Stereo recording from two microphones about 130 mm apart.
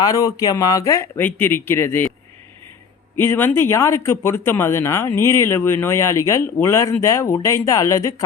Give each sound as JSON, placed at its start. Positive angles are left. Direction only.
{"t": 0.0, "sound": "speech", "side_deg": 25}
{"t": 3.2, "sound": "speech", "side_deg": 15}